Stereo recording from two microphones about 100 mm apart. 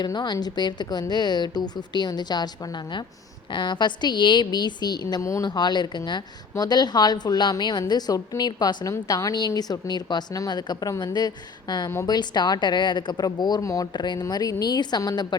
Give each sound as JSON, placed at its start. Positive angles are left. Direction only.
{"t": 0.0, "sound": "a woman's voice", "side_deg": 45}
{"t": 3.5, "sound": "a woman's voice", "side_deg": 50}
{"t": 5.2, "sound": "speech", "side_deg": 30}
{"t": 5.5, "sound": "a woman's voice", "side_deg": 45}
{"t": 13.9, "sound": "a woman's voice", "side_deg": 45}